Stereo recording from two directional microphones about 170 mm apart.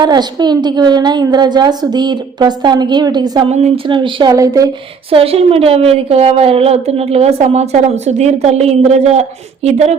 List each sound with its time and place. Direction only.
0.0 s a woman's voice: 25° right (ahead or behind)
5.1 s a woman's voice: 35° right (ahead or behind)